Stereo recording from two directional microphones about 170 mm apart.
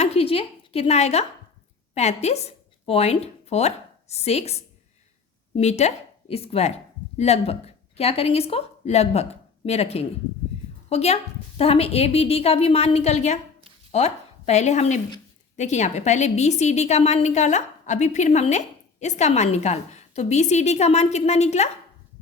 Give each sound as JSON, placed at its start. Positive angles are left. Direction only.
{"t": 0.0, "sound": "a woman's voice", "side_deg": 35}